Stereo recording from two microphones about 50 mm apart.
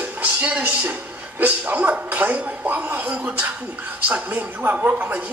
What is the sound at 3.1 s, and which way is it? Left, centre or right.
A woman's voice, right.